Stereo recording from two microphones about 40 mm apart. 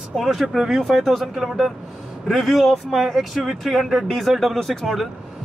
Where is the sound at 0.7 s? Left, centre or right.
Centre.